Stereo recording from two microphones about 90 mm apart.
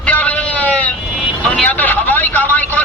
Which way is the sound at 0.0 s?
15° left (ahead or behind).